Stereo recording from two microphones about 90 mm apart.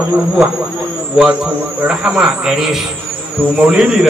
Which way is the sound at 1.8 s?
10° right (ahead or behind).